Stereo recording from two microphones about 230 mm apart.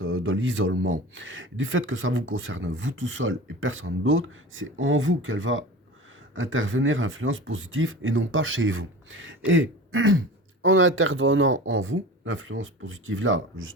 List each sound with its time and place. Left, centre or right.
0.0 s speech: right